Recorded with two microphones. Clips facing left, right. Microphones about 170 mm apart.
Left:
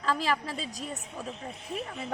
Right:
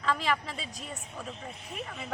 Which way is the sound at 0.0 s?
40° left (ahead or behind).